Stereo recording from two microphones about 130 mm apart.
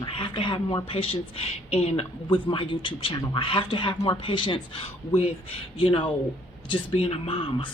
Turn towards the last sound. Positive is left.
turn(degrees=45)  # may be behind; listen again after turning